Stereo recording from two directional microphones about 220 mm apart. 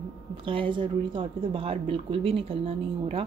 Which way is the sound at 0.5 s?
20° right (ahead or behind).